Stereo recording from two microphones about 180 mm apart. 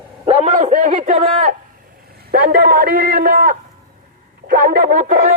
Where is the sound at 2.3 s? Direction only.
55° right (ahead or behind).